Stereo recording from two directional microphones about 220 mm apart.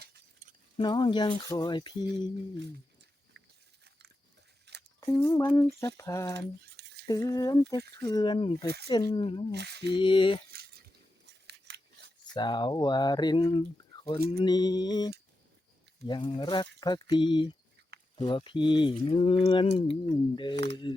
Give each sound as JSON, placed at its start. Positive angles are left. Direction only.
{"t": 0.0, "sound": "keys jangling", "side_deg": -35}
{"t": 0.8, "sound": "speech", "side_deg": 20}
{"t": 4.7, "sound": "a sound", "side_deg": -50}
{"t": 5.1, "sound": "a sound", "side_deg": 10}
{"t": 7.9, "sound": "speech", "side_deg": 20}
{"t": 9.5, "sound": "speech", "side_deg": -50}
{"t": 9.9, "sound": "speech", "side_deg": 20}
{"t": 10.5, "sound": "a sound", "side_deg": -45}
{"t": 11.4, "sound": "scissors", "side_deg": -50}
{"t": 12.3, "sound": "speech", "side_deg": 20}